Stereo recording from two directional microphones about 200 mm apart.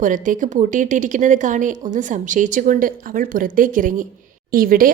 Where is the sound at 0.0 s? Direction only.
40° right (ahead or behind).